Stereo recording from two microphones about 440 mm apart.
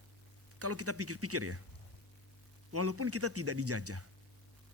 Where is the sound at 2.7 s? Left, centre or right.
Right.